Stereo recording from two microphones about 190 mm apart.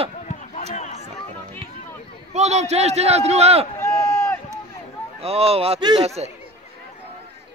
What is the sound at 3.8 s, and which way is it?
Run, 15° left (ahead or behind).